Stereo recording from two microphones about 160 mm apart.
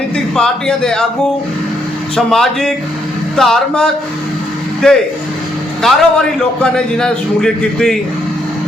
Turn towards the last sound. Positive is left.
turn(degrees=5)  # may be behind; listen again after turning